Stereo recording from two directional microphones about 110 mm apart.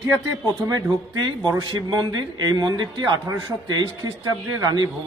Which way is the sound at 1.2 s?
35° right (ahead or behind).